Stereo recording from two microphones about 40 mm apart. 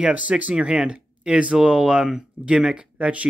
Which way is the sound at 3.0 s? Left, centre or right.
Right.